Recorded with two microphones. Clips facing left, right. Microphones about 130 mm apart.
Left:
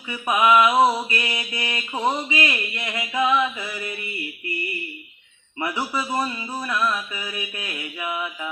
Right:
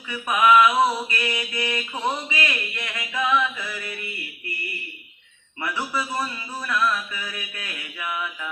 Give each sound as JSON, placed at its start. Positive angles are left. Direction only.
{"t": 0.1, "sound": "mantra", "side_deg": 20}
{"t": 5.5, "sound": "mantra", "side_deg": 20}